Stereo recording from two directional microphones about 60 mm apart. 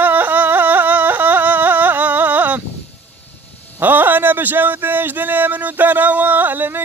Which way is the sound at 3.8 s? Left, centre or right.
Right.